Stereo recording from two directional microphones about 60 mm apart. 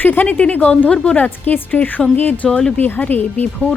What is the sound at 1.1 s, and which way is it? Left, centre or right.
Speech, left.